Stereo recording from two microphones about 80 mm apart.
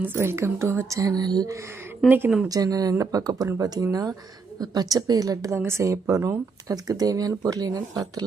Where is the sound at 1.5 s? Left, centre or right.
Right.